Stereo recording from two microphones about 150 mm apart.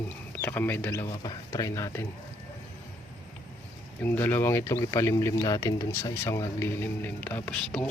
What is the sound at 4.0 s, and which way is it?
Speech, 15° left (ahead or behind).